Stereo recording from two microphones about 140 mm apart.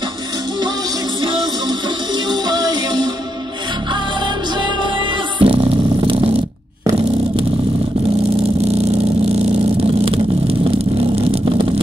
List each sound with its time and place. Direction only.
2.5 s music: 30° right (ahead or behind)
5.4 s music: 40° right (ahead or behind)
8.5 s vehicle: 50° right (ahead or behind)